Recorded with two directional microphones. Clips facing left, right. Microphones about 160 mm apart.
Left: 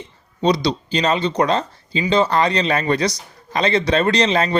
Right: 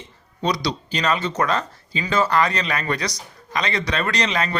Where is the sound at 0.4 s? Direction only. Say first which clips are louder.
Left 6 dB; 25° left (ahead or behind).